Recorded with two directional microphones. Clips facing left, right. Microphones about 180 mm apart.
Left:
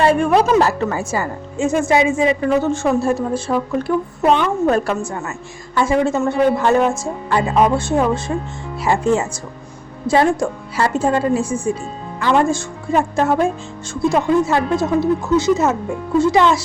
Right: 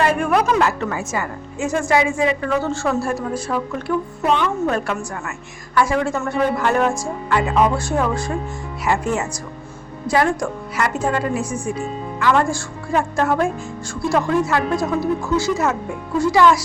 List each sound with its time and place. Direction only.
0.0 s a woman's voice: 30° left (ahead or behind)
5.7 s a woman's voice: 25° left (ahead or behind)